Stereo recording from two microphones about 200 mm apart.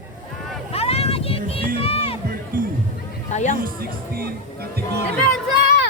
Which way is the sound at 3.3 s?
35° left (ahead or behind).